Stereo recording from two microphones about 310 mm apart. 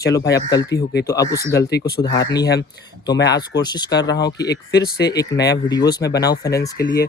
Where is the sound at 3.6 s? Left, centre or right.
Centre.